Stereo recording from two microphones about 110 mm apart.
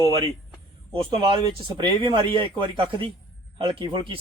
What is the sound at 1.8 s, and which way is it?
Speech, 45° right (ahead or behind).